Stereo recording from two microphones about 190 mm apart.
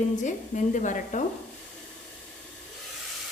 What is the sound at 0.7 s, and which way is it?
Speech, 40° left (ahead or behind).